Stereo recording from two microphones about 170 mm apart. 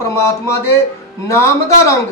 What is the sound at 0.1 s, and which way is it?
Speech, 15° left (ahead or behind).